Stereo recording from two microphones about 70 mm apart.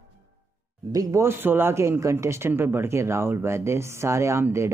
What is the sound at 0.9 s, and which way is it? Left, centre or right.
Speech, right.